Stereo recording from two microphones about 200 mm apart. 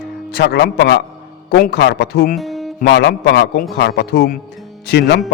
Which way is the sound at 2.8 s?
60° left (ahead or behind).